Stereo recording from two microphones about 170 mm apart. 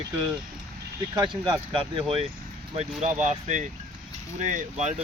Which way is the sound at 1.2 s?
30° right (ahead or behind).